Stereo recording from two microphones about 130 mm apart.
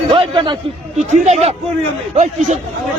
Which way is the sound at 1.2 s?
60° right (ahead or behind).